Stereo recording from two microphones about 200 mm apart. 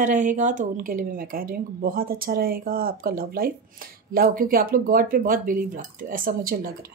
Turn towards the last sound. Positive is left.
turn(degrees=-45)  # may be behind; listen again after turning